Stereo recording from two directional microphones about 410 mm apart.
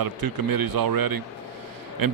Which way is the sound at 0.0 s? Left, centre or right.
Right.